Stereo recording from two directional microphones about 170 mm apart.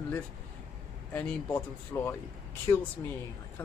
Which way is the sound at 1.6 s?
15° left (ahead or behind).